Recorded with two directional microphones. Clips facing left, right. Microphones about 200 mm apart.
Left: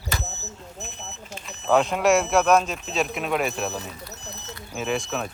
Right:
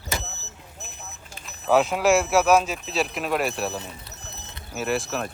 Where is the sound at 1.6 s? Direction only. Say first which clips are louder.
Even; 5° right (ahead or behind).